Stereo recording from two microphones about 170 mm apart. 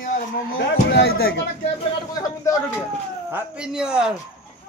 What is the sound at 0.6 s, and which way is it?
Speech, 80° left.